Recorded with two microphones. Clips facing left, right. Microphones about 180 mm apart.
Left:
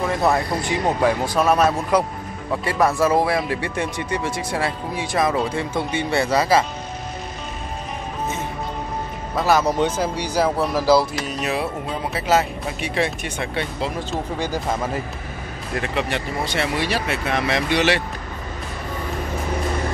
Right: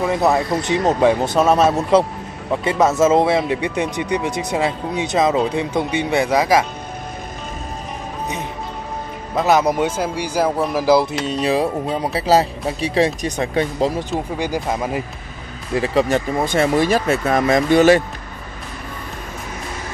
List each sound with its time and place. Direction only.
0.0 s speech: 20° right (ahead or behind)
9.3 s speech: 20° right (ahead or behind)
11.2 s speech: 35° right (ahead or behind)
14.4 s speech: 15° right (ahead or behind)
15.7 s speech: 35° right (ahead or behind)